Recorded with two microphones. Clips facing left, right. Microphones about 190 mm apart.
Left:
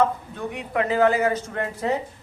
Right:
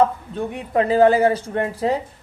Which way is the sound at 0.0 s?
30° right (ahead or behind).